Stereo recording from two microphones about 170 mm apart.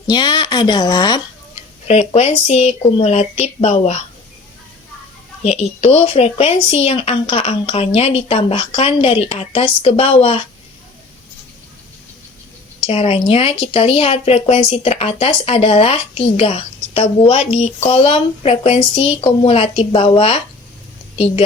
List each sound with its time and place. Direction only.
0.1 s speech: 25° left (ahead or behind)
1.9 s speech: 40° left (ahead or behind)
5.4 s speech: 40° left (ahead or behind)
12.8 s speech: 35° left (ahead or behind)